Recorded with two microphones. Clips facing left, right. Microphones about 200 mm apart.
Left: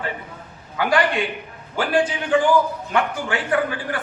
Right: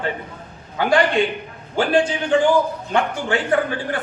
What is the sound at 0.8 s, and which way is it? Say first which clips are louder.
A man's voice: right 3 dB; 25° right (ahead or behind).